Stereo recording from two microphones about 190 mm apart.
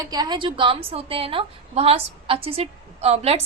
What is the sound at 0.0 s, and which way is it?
A woman's voice, 20° right (ahead or behind).